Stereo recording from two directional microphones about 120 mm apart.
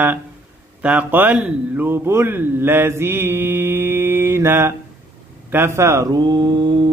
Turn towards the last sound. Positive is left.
turn(degrees=-40)  # may be behind; listen again after turning